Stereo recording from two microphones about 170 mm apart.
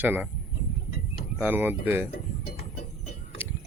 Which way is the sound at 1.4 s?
10° right (ahead or behind).